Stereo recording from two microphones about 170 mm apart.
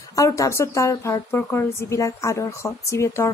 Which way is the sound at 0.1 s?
20° left (ahead or behind).